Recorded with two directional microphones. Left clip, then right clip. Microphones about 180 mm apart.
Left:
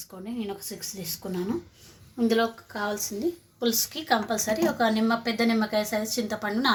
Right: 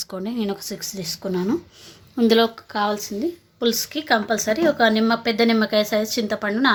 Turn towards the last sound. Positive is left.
turn(degrees=-35)  # may be behind; listen again after turning